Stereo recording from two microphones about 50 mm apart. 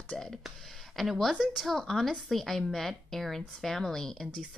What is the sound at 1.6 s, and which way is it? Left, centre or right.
A woman's voice, centre.